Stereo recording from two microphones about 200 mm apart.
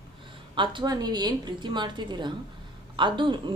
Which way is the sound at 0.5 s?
25° right (ahead or behind).